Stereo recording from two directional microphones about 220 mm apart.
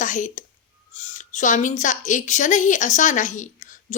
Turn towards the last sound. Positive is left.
turn(degrees=35)  # may be behind; listen again after turning